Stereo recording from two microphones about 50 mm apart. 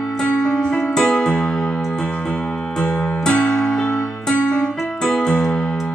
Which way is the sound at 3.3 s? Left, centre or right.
Left.